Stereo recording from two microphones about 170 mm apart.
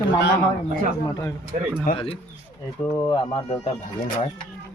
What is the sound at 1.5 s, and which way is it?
Speech, 40° right (ahead or behind).